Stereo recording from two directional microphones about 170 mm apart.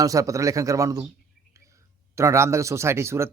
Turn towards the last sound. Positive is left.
turn(degrees=-15)  # may be behind; listen again after turning